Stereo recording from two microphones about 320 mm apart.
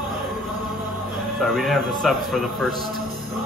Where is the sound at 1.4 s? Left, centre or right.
Centre.